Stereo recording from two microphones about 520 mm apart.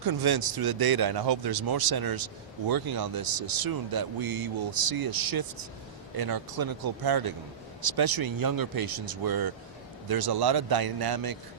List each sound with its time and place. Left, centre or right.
0.0 s speech: right